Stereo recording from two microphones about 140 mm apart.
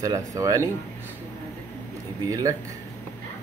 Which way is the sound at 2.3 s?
25° right (ahead or behind).